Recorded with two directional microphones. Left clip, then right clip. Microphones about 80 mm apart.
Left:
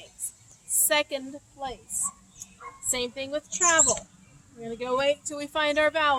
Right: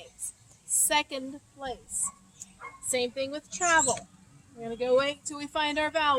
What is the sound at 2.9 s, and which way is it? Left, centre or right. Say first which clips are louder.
A woman's voice: even; left.